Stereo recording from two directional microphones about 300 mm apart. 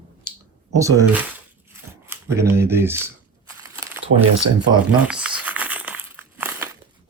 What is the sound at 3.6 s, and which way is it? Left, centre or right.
Crumpling, centre.